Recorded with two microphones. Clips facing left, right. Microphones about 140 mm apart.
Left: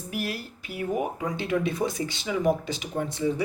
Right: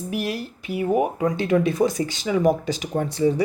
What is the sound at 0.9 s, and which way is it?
Speech, 65° right (ahead or behind).